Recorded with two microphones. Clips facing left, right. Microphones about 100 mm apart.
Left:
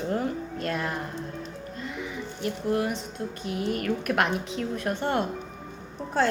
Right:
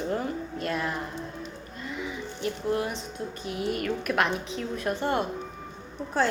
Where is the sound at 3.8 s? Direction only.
55° left (ahead or behind).